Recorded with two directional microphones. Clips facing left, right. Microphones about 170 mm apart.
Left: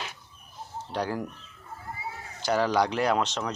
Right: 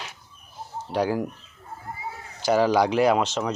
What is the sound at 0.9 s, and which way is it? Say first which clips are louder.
Speech: right 6 dB; 10° right (ahead or behind).